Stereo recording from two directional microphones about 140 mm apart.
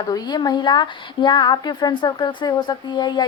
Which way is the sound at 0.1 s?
30° left (ahead or behind).